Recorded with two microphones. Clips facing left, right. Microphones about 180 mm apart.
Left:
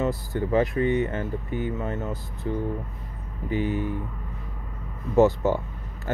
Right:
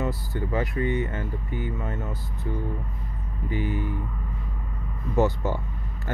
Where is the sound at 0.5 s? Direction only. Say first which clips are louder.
Left 5 dB; 25° left (ahead or behind).